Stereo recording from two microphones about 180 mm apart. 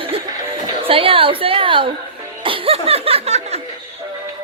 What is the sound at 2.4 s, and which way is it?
Laughter, 30° right (ahead or behind).